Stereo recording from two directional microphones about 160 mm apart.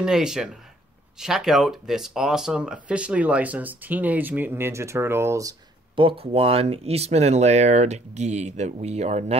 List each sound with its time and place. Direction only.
0.0 s speech: 5° right (ahead or behind); by 5.6 s 20° right (ahead or behind)
5.9 s speech: 35° right (ahead or behind)